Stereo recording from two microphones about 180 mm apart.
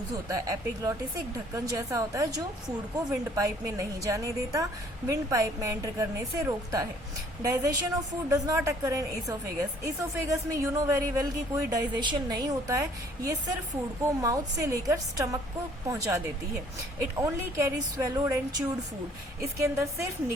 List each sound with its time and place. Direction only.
0.3 s a woman's voice: 20° right (ahead or behind)
3.3 s a woman's voice: 20° right (ahead or behind)
19.4 s a woman's voice: 15° right (ahead or behind)